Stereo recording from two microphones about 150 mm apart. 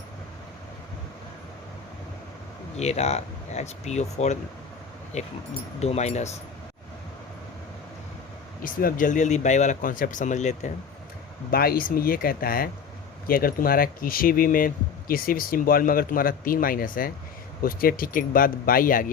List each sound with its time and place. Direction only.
2.7 s speech: 45° left (ahead or behind)
8.6 s speech: 65° left (ahead or behind)
11.5 s speech: 85° left; by 19.1 s 65° left (ahead or behind)